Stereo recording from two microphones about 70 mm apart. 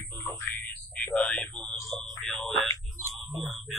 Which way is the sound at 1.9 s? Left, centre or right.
Centre.